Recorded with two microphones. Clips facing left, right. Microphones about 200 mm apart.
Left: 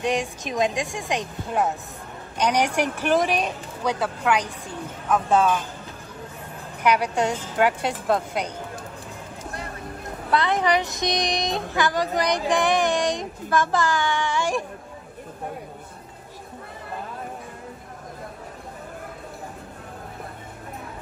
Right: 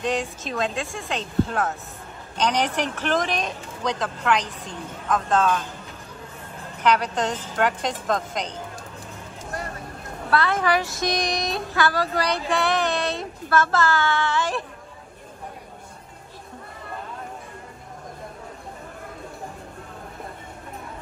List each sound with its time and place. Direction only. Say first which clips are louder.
0.0 s speech: left 1 dB; 15° left (ahead or behind)
6.8 s speech: left 1 dB; 10° left (ahead or behind)
10.0 s speech: even; 20° left (ahead or behind)